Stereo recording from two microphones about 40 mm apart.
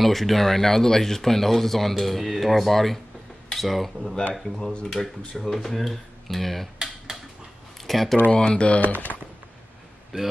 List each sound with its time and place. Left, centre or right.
0.0 s speech: centre
5.0 s speech: centre
7.8 s speech: centre
8.3 s speech: left
8.9 s speech: left
10.1 s speech: centre